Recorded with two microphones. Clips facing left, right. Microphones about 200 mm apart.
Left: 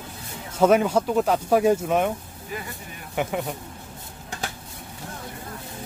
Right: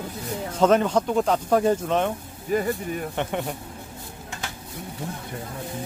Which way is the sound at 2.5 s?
45° right (ahead or behind).